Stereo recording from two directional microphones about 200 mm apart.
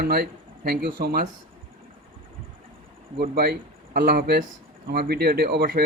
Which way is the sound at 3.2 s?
50° right (ahead or behind).